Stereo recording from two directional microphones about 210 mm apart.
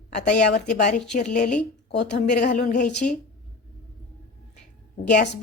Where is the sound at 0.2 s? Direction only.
35° left (ahead or behind).